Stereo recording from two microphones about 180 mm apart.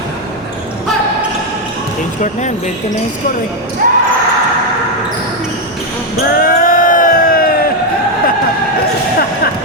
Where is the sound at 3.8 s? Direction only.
50° right (ahead or behind).